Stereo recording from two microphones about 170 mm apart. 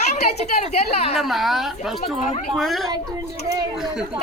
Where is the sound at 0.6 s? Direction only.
40° left (ahead or behind).